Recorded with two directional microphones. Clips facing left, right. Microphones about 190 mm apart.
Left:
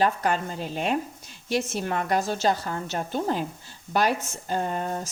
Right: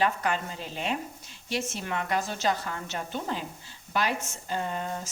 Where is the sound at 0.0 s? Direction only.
40° left (ahead or behind).